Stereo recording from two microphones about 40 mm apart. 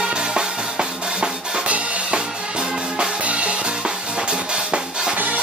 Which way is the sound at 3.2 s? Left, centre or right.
Right.